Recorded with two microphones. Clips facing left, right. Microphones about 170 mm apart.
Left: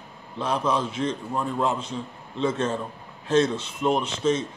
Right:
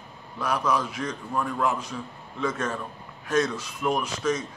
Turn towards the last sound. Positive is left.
turn(degrees=25)  # may be behind; listen again after turning